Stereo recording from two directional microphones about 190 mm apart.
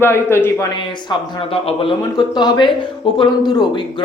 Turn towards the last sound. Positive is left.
turn(degrees=25)  # may be behind; listen again after turning